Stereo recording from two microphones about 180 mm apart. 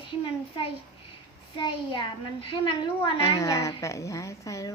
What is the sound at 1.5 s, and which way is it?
A child's voice, 25° left (ahead or behind).